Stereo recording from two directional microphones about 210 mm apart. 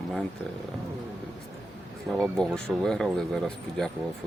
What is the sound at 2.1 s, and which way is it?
Speech, centre (ahead or behind).